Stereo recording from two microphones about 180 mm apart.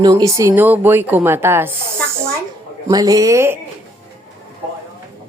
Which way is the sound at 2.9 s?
20° right (ahead or behind).